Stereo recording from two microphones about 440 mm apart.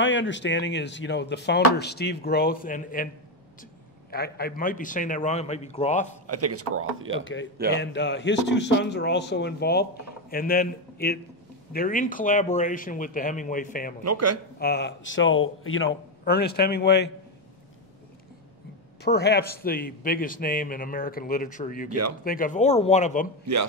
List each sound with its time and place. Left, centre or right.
0.0 s speech: left
4.1 s speech: left
6.2 s speech: right
7.7 s speech: left
14.0 s speech: right
14.6 s speech: left
19.0 s speech: left
21.8 s speech: right
22.2 s speech: centre